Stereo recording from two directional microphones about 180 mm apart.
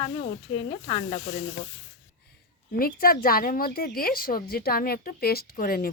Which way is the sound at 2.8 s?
55° left (ahead or behind).